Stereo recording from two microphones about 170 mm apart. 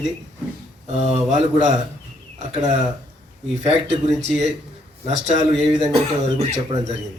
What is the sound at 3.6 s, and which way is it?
Speech, 40° right (ahead or behind).